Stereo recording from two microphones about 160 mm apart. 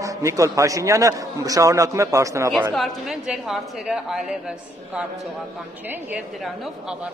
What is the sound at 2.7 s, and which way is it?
A woman's voice, centre (ahead or behind).